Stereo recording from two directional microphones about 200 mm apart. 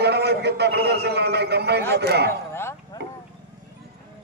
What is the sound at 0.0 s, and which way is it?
A man's voice, 55° right (ahead or behind).